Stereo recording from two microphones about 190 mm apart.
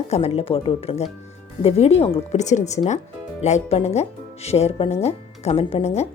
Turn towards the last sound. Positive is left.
turn(degrees=30)  # may be behind; listen again after turning